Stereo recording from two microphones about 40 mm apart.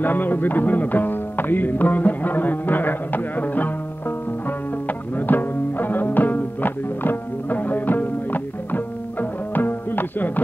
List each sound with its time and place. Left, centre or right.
0.0 s music: left